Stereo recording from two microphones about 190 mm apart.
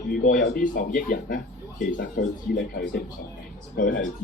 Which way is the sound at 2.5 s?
60° left (ahead or behind).